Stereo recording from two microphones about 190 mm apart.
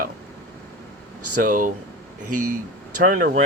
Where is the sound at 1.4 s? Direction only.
45° right (ahead or behind).